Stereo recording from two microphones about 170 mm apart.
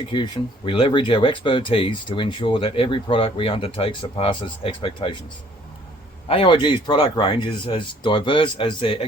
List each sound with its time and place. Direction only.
0.1 s speech: 30° left (ahead or behind)
6.2 s speech: 30° left (ahead or behind)